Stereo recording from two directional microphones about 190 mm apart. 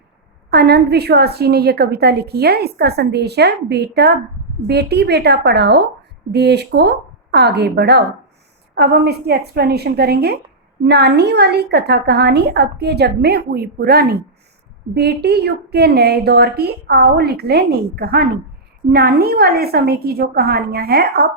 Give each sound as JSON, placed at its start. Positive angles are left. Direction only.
{"t": 0.5, "sound": "a woman's voice", "side_deg": -60}